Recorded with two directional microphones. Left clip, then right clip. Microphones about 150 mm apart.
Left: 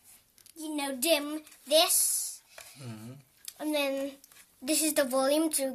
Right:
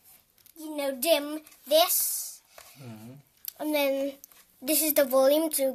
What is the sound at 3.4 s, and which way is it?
A child's voice, 35° right (ahead or behind).